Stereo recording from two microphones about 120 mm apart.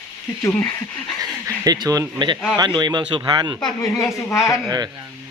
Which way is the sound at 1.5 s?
30° right (ahead or behind).